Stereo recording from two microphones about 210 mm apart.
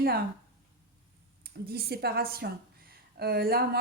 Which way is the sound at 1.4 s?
50° right (ahead or behind).